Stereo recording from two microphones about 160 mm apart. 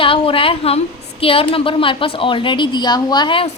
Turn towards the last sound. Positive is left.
turn(degrees=30)  # may be behind; listen again after turning